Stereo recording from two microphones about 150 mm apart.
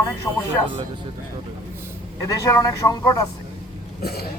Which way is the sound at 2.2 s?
20° left (ahead or behind).